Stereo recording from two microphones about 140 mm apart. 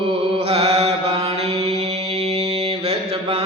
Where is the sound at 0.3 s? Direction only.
45° right (ahead or behind).